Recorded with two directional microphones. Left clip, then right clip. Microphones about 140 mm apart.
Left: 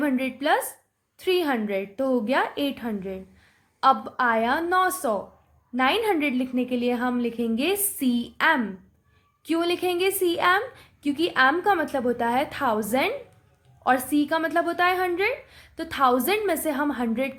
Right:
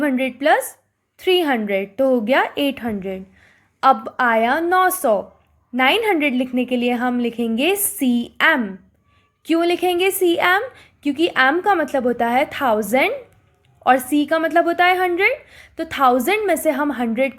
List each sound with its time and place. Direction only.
0.0 s a woman's voice: 30° right (ahead or behind)